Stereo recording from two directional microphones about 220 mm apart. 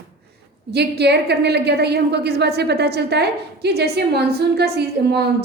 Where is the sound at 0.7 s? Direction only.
50° right (ahead or behind).